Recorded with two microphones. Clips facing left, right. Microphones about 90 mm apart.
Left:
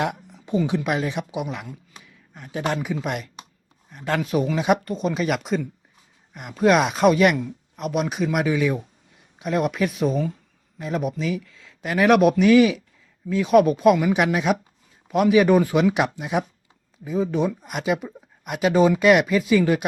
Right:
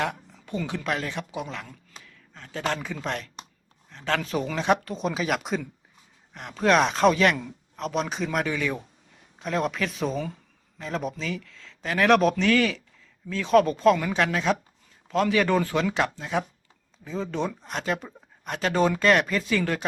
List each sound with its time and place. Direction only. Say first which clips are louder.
0.0 s speech: left 3 dB; 15° left (ahead or behind)